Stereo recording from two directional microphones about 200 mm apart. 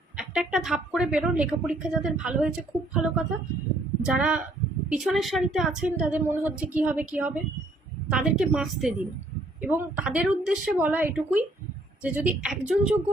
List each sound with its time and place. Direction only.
0.2 s a woman's voice: 5° right (ahead or behind)